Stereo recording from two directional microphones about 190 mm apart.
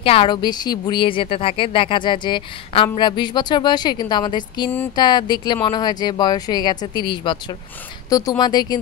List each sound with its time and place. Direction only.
0.0 s speech: 30° left (ahead or behind)